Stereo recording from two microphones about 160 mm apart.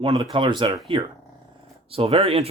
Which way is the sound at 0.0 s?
30° right (ahead or behind).